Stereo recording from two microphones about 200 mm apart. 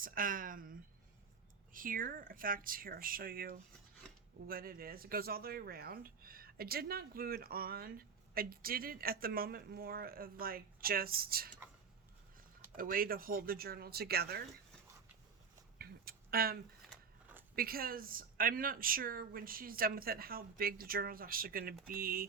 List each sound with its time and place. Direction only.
0.0 s speech: 45° right (ahead or behind)
12.7 s speech: 45° right (ahead or behind)
15.8 s a sound: 50° right (ahead or behind)
17.5 s speech: 50° right (ahead or behind)